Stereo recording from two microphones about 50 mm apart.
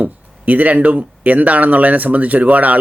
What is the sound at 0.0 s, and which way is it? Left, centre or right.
Speech, right.